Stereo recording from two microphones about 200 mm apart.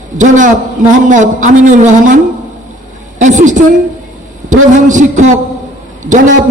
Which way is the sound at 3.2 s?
40° right (ahead or behind).